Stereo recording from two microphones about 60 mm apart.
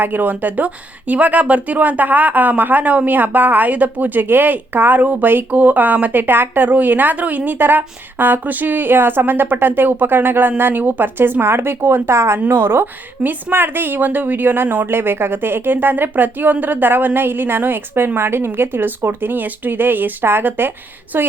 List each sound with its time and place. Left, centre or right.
0.0 s speech: right